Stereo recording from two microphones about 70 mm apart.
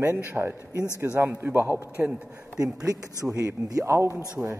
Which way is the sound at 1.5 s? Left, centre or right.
Right.